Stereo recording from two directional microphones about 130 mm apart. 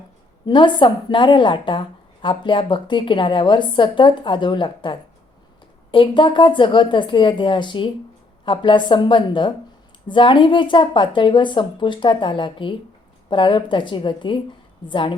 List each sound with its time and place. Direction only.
0.4 s a woman's voice: 35° left (ahead or behind)